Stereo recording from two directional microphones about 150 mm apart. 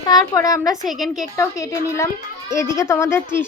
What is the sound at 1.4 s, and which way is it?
A woman's voice, 20° left (ahead or behind).